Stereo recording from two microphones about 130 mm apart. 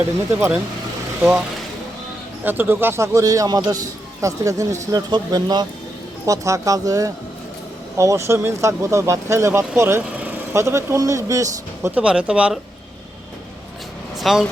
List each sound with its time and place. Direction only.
0.3 s speech: 15° right (ahead or behind)
2.4 s speech: 15° right (ahead or behind)
11.9 s speech: 10° right (ahead or behind)
14.2 s speech: centre (ahead or behind)